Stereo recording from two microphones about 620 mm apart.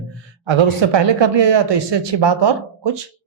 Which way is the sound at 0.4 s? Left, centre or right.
Right.